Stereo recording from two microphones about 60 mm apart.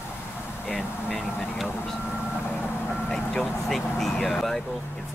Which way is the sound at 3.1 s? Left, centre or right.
Centre.